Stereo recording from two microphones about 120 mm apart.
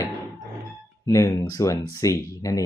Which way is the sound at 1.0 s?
25° left (ahead or behind).